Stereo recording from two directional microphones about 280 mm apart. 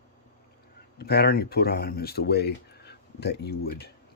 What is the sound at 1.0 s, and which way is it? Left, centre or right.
Speech, left.